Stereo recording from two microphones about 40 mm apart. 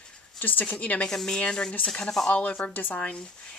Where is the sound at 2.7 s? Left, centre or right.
Left.